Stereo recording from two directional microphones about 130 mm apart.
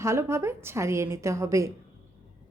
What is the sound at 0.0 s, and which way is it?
A woman's voice, 20° right (ahead or behind).